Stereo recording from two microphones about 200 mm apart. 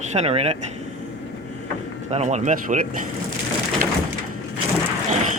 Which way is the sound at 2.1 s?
35° right (ahead or behind).